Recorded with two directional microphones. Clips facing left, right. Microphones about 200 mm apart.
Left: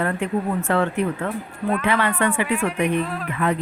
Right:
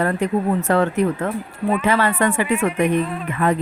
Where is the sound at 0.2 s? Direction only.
40° right (ahead or behind).